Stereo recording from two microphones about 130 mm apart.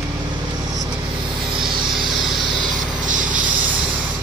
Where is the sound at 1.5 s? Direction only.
35° right (ahead or behind).